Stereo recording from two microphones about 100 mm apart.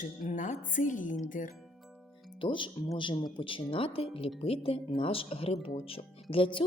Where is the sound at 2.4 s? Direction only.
55° left (ahead or behind).